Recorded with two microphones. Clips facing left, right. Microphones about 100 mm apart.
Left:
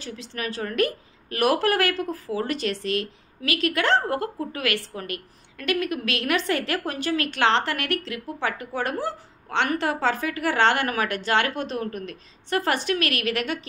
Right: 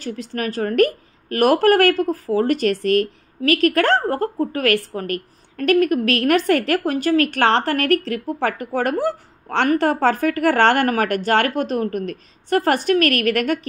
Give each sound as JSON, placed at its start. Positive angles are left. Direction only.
{"t": 0.0, "sound": "a woman's voice", "side_deg": -45}